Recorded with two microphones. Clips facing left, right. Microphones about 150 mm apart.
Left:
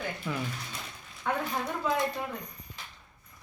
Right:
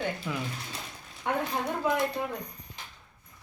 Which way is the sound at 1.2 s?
20° right (ahead or behind).